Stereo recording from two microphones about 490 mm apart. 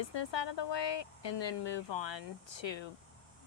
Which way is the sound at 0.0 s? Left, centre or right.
Left.